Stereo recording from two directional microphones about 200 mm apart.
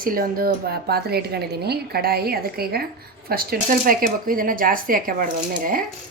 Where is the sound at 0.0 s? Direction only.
45° right (ahead or behind).